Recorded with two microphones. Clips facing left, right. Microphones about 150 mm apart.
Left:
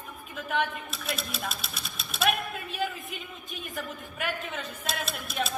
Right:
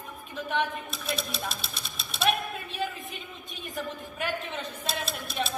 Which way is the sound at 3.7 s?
30° right (ahead or behind).